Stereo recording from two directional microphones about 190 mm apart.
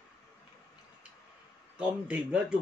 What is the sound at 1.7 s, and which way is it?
Speech, 5° right (ahead or behind).